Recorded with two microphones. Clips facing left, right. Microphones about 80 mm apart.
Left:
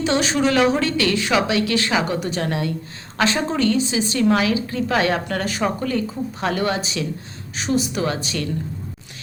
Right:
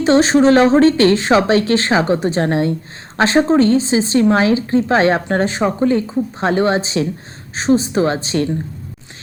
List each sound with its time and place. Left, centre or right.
0.0 s speech: right